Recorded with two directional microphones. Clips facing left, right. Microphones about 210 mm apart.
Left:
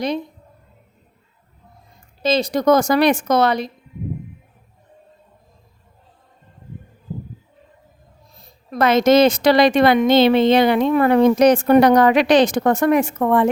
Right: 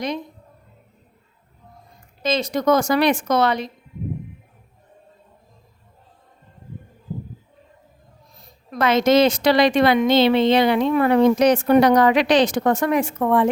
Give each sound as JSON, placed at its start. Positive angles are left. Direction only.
{"t": 2.2, "sound": "a woman's voice", "side_deg": 35}
{"t": 8.4, "sound": "a woman's voice", "side_deg": 40}